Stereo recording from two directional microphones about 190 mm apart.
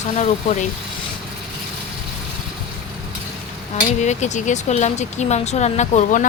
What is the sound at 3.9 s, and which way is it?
Speech, 40° left (ahead or behind).